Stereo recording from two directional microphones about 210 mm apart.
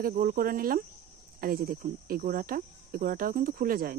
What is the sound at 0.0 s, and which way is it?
Speech, 40° right (ahead or behind).